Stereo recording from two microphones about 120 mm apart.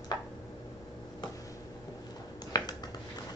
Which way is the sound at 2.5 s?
35° left (ahead or behind).